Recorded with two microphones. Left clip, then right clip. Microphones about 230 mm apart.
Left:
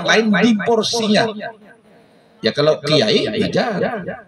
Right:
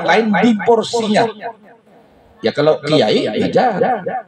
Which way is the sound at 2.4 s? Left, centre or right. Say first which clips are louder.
Right 2 dB; left.